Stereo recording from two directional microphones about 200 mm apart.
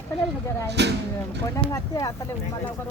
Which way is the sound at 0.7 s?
60° right (ahead or behind).